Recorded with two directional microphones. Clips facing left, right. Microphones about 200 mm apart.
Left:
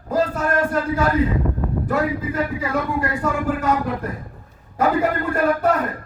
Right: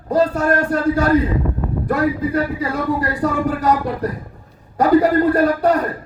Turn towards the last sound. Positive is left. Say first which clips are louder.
# right 3 dB
turn(degrees=-35)  # may be behind; listen again after turning